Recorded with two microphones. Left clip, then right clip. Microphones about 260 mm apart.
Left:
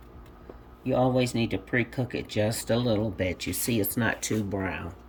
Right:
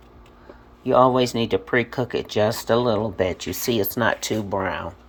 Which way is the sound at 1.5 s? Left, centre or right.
Right.